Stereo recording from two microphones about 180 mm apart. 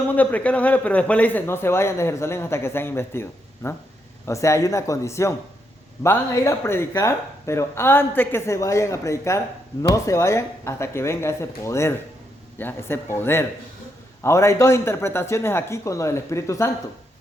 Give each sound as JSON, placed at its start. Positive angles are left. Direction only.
{"t": 0.1, "sound": "a man's voice", "side_deg": 10}